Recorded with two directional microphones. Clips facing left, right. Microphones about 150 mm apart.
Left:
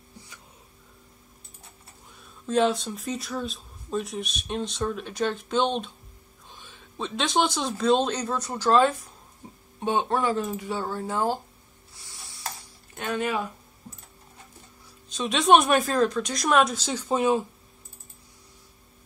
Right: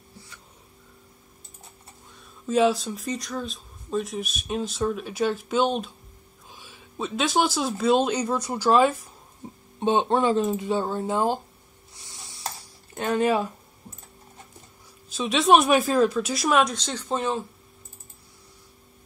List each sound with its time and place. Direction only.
2.4 s speech: 5° right (ahead or behind)
9.8 s speech: 25° right (ahead or behind)
11.9 s a sound: 20° right (ahead or behind)
12.9 s speech: 35° right (ahead or behind)
15.0 s speech: 5° right (ahead or behind)